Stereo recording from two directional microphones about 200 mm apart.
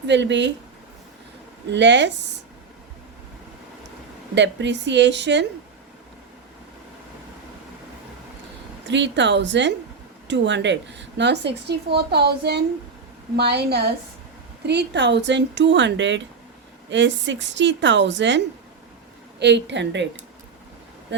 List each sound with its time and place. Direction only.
0.1 s a woman's voice: 65° right (ahead or behind)
1.7 s a woman's voice: 60° right (ahead or behind)
4.4 s a woman's voice: 60° right (ahead or behind)
8.9 s a woman's voice: 60° right (ahead or behind)